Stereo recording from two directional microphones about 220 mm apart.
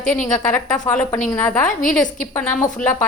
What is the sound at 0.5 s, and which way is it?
A woman's voice, 5° left (ahead or behind).